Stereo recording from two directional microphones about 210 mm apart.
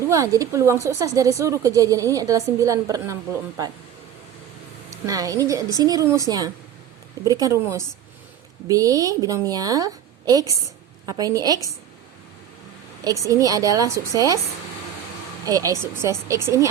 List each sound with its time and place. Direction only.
0.0 s speech: 15° right (ahead or behind)
4.9 s speech: 15° right (ahead or behind)
13.1 s speech: 15° right (ahead or behind)
15.4 s speech: 15° right (ahead or behind)